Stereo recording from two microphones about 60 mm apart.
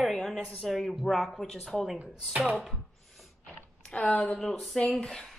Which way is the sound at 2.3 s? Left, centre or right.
Right.